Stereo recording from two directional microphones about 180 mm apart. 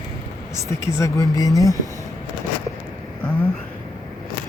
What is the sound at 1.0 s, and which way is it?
Speech, 20° left (ahead or behind).